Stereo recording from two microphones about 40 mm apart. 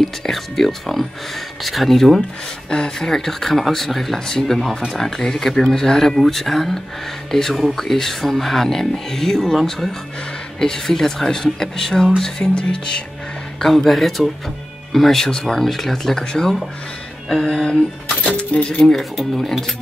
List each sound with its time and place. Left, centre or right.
0.0 s speech: centre
2.7 s music: centre
3.1 s speech: centre
10.6 s speech: centre
12.2 s music: centre
13.6 s speech: centre
18.4 s speech: left
18.8 s speech: centre